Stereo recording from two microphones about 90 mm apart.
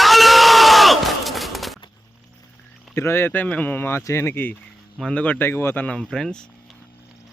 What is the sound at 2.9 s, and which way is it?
Speech, 30° left (ahead or behind).